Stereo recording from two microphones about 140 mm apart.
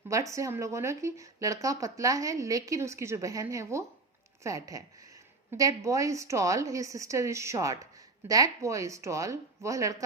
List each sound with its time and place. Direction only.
0.1 s speech: 20° right (ahead or behind)